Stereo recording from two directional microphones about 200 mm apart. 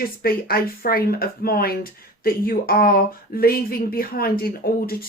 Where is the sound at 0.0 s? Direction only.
50° left (ahead or behind).